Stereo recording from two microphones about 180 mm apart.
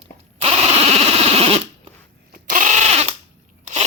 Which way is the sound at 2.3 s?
45° right (ahead or behind).